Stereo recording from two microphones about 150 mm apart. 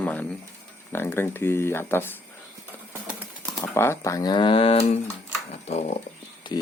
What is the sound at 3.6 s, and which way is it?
Speech, 15° left (ahead or behind).